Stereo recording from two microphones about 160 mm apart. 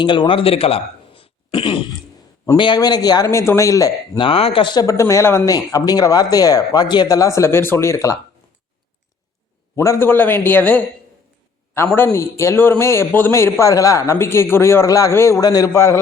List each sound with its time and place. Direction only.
0.0 s speech: 30° left (ahead or behind)
4.2 s speech: 35° left (ahead or behind); by 8.1 s 20° left (ahead or behind)
9.7 s a man's voice: 20° left (ahead or behind)